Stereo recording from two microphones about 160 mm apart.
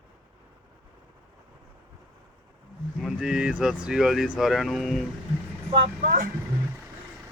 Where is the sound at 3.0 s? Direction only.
5° right (ahead or behind).